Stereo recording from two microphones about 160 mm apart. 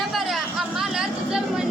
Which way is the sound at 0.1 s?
Centre (ahead or behind).